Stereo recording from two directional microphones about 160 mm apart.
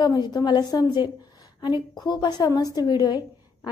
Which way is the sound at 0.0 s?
25° left (ahead or behind).